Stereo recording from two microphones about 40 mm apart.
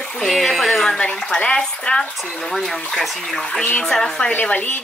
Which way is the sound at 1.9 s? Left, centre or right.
Left.